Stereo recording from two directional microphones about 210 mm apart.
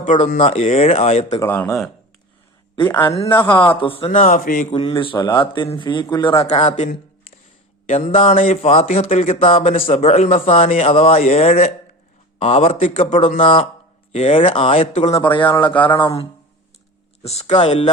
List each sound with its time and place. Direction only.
0.0 s speech: 35° left (ahead or behind)
1.5 s speech: 10° left (ahead or behind)
3.6 s speech: 25° left (ahead or behind); by 4.7 s 40° left (ahead or behind)
4.7 s speech: 25° left (ahead or behind)
15.6 s speech: 5° left (ahead or behind)
16.0 s speech: 25° left (ahead or behind)
17.2 s speech: 30° left (ahead or behind)